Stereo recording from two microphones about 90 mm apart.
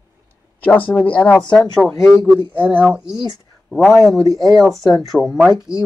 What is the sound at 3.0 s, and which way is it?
Speech, 5° right (ahead or behind).